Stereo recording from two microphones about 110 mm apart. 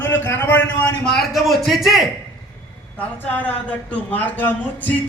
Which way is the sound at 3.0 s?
15° left (ahead or behind).